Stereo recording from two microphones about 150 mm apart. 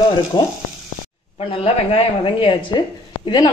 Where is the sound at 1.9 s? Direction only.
35° left (ahead or behind).